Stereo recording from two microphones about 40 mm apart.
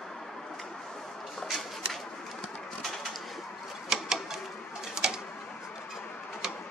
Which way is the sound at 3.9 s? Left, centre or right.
Centre.